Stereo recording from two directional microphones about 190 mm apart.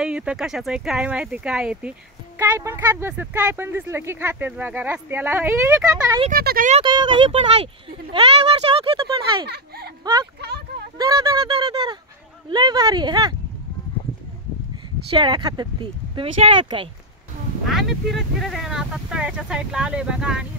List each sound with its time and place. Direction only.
0.0 s speech: 5° right (ahead or behind)
6.3 s speech: 50° right (ahead or behind)
6.7 s speech: 25° right (ahead or behind)
8.6 s a sound: 30° right (ahead or behind)
10.0 s speech: 20° right (ahead or behind)
10.4 s speech: 60° right (ahead or behind)
11.0 s speech: 20° right (ahead or behind)
15.0 s speech: 25° right (ahead or behind)
17.6 s speech: centre (ahead or behind)